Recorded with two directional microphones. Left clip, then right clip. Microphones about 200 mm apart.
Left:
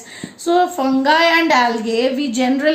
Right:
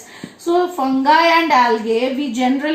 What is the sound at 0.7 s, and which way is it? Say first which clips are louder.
Speech: right 1 dB; 50° left (ahead or behind).